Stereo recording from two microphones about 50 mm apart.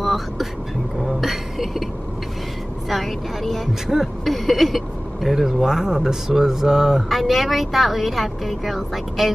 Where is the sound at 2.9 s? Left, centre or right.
Centre.